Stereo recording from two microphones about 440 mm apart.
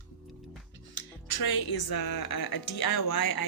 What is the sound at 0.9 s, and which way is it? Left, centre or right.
Speech, left.